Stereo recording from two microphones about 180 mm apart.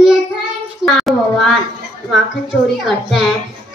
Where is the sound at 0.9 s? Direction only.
Centre (ahead or behind).